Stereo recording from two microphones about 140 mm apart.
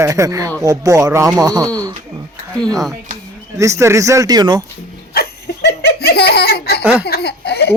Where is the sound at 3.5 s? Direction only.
20° right (ahead or behind).